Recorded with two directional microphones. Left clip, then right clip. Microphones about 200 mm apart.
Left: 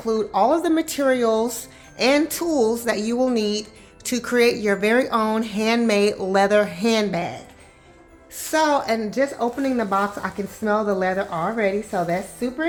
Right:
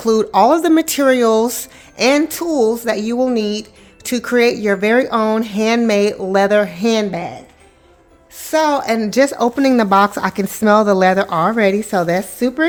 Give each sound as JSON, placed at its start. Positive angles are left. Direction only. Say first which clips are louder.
{"t": 0.0, "sound": "speech", "louder": "right 7 dB", "side_deg": -45}
{"t": 8.4, "sound": "speech", "louder": "right 4 dB", "side_deg": -20}
{"t": 9.0, "sound": "speech", "louder": "right 8 dB", "side_deg": -55}